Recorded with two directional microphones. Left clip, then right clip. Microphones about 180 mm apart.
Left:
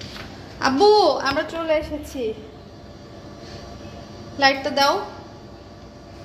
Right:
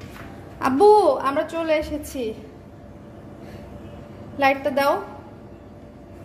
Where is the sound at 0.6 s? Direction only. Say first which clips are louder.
Even; 10° right (ahead or behind).